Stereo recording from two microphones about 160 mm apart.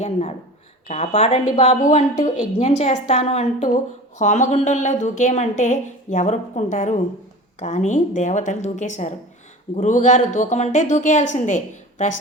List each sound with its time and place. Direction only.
0.0 s a woman's voice: 45° left (ahead or behind)